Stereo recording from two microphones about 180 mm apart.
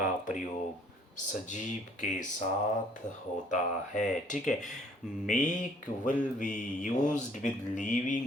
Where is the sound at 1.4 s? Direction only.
45° left (ahead or behind).